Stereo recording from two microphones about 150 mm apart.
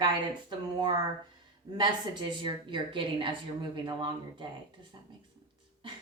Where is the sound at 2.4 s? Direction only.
35° right (ahead or behind).